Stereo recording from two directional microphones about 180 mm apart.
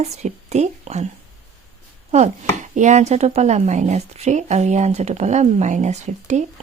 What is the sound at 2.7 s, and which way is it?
Speech, 40° right (ahead or behind).